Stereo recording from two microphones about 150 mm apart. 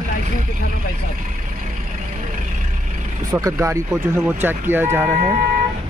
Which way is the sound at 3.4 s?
20° right (ahead or behind).